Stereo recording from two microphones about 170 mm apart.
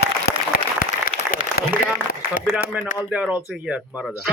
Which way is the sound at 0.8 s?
55° left (ahead or behind).